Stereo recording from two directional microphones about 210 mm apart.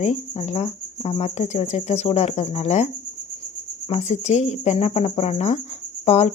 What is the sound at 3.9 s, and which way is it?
Speech, 30° left (ahead or behind).